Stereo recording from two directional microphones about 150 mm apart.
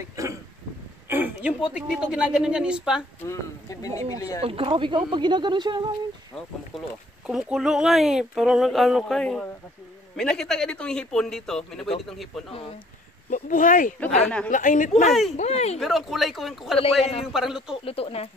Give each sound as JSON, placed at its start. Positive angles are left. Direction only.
{"t": 0.1, "sound": "a sound", "side_deg": -20}
{"t": 1.7, "sound": "speech", "side_deg": -5}
{"t": 3.2, "sound": "speech", "side_deg": 20}
{"t": 4.4, "sound": "speech", "side_deg": -40}
{"t": 6.7, "sound": "speech", "side_deg": 0}
{"t": 13.3, "sound": "speech", "side_deg": 60}
{"t": 14.2, "sound": "a woman's voice", "side_deg": 5}
{"t": 14.5, "sound": "speech", "side_deg": 60}
{"t": 15.3, "sound": "speech", "side_deg": 45}
{"t": 15.8, "sound": "speech", "side_deg": 0}
{"t": 16.7, "sound": "a man's voice", "side_deg": 40}
{"t": 17.3, "sound": "speech", "side_deg": -5}
{"t": 17.8, "sound": "speech", "side_deg": 40}